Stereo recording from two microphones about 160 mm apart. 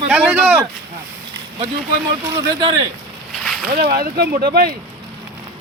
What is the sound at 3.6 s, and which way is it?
Speech, 75° right (ahead or behind).